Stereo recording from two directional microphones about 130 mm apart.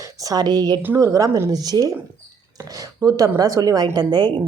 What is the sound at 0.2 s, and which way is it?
Speech, 30° right (ahead or behind).